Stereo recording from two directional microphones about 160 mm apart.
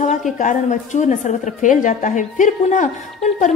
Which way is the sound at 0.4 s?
50° left (ahead or behind).